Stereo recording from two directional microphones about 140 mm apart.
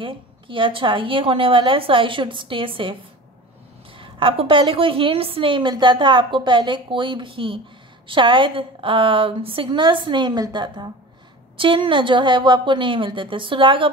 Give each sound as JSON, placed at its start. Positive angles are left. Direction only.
{"t": 0.0, "sound": "a woman's voice", "side_deg": -40}